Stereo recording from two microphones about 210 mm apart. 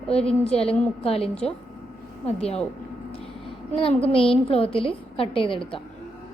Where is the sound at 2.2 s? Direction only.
30° left (ahead or behind).